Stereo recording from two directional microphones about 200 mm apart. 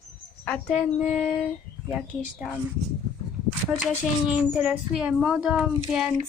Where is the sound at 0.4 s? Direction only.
5° left (ahead or behind).